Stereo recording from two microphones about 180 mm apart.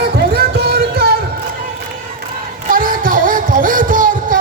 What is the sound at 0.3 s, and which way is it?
Music, 60° right (ahead or behind).